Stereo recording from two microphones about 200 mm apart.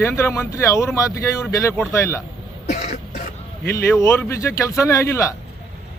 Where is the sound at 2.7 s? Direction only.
35° left (ahead or behind).